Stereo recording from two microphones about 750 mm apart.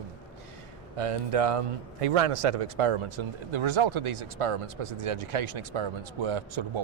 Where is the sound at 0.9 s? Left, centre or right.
Right.